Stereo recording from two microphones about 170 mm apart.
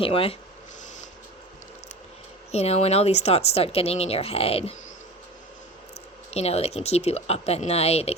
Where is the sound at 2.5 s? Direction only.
40° left (ahead or behind).